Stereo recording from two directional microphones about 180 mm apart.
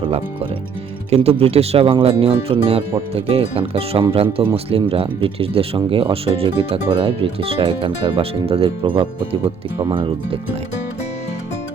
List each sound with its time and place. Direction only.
1.1 s speech: 35° right (ahead or behind)